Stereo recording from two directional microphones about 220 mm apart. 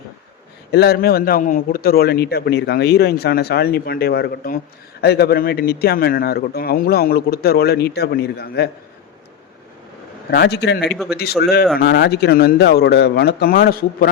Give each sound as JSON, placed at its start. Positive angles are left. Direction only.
{"t": 0.7, "sound": "a man's voice", "side_deg": 45}
{"t": 10.3, "sound": "a man's voice", "side_deg": 50}
{"t": 10.9, "sound": "a man's voice", "side_deg": 0}
{"t": 11.2, "sound": "a man's voice", "side_deg": 45}